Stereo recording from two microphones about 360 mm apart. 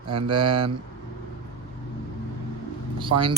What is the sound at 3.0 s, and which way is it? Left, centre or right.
Speech, centre.